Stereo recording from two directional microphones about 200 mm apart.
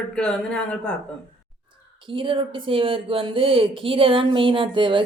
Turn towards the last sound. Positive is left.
turn(degrees=-25)  # may be behind; listen again after turning